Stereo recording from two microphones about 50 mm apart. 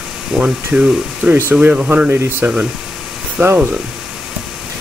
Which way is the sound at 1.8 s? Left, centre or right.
Right.